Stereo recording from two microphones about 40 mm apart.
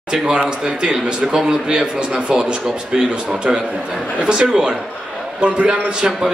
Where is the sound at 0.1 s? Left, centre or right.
Right.